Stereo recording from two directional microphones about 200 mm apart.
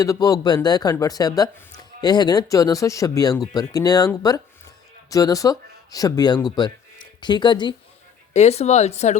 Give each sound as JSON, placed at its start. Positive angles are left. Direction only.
{"t": 0.0, "sound": "speech", "side_deg": 15}
{"t": 8.3, "sound": "speech", "side_deg": 35}